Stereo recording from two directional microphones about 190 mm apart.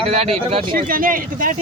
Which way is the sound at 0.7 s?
50° right (ahead or behind).